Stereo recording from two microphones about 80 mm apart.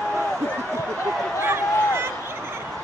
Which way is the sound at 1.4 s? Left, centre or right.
Right.